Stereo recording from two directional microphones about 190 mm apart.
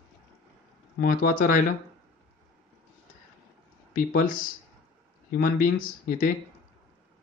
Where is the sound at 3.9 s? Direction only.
45° left (ahead or behind).